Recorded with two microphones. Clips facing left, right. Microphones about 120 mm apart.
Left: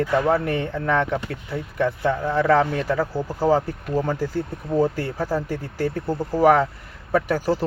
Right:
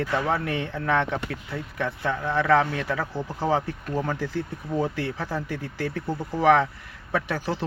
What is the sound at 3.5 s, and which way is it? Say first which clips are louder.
Speech: left 5 dB; 35° left (ahead or behind).